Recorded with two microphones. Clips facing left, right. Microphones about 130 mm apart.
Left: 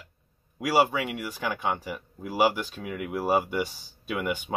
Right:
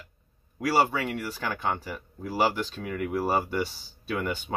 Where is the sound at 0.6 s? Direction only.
10° left (ahead or behind).